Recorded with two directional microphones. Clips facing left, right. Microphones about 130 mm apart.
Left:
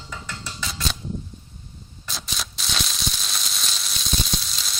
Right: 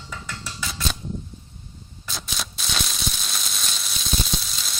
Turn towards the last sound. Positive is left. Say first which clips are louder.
# even
turn(degrees=0)  # may be behind; listen again after turning